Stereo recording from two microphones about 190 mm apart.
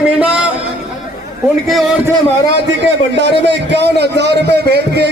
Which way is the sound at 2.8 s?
65° right (ahead or behind).